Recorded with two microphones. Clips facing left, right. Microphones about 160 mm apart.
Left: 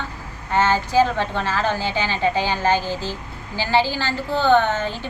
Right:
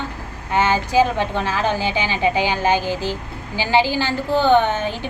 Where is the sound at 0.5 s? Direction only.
15° right (ahead or behind).